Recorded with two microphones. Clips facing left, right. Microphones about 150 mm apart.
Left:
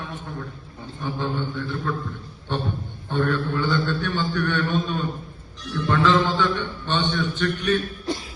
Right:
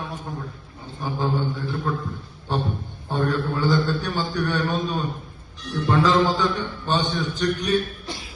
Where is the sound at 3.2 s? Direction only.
40° right (ahead or behind).